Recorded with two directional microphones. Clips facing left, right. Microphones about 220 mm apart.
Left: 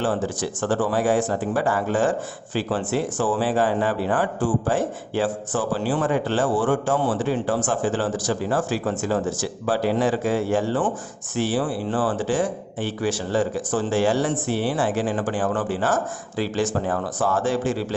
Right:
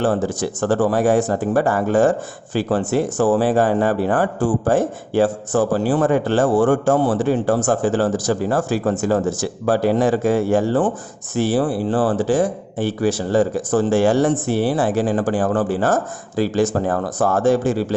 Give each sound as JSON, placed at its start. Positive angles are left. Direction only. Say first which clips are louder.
{"t": 0.0, "sound": "a man's voice", "louder": "right 5 dB", "side_deg": -45}